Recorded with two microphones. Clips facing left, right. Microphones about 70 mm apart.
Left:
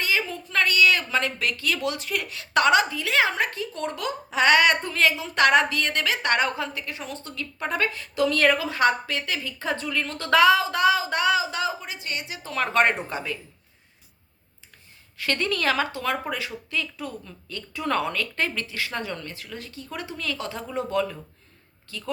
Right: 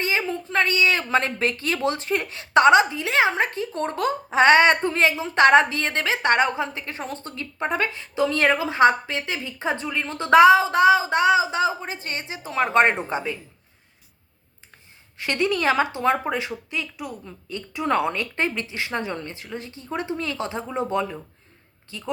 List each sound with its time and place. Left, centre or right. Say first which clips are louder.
0.0 s a woman's voice: right 2 dB; right
12.4 s a woman's voice: right 3 dB; centre
15.2 s a woman's voice: right 3 dB; centre